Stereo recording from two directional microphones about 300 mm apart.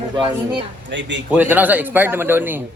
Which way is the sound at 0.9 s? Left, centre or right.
Right.